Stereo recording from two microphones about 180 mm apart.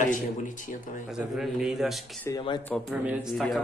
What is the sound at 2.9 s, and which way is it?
Speech, 5° right (ahead or behind).